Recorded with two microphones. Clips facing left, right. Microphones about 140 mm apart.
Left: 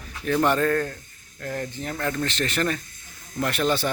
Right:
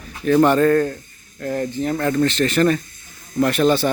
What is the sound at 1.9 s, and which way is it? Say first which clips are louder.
Speech: right 8 dB; 40° right (ahead or behind).